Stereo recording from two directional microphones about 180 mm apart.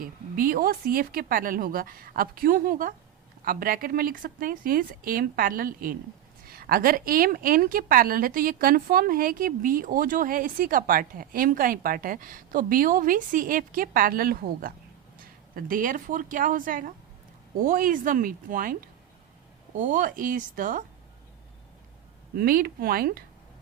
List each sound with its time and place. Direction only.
0.0 s a woman's voice: 50° right (ahead or behind)
22.4 s speech: 55° right (ahead or behind)